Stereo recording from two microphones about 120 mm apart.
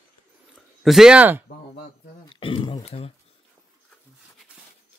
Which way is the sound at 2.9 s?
60° left (ahead or behind).